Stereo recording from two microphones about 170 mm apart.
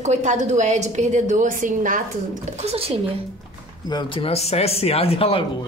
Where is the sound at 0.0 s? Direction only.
45° right (ahead or behind).